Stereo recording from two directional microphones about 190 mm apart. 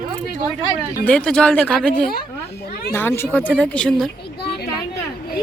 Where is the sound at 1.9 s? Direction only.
50° left (ahead or behind).